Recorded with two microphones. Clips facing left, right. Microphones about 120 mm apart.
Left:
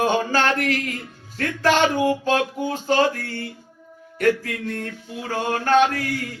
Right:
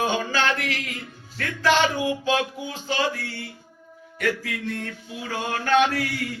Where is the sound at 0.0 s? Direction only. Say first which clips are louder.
Left 4 dB; 45° left (ahead or behind).